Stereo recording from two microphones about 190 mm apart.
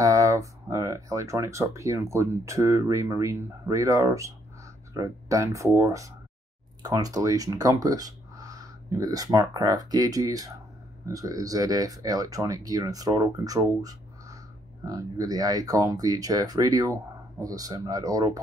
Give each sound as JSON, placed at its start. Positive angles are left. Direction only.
{"t": 0.0, "sound": "speech", "side_deg": -15}